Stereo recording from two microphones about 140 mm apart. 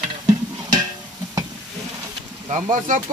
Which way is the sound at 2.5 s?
70° right (ahead or behind).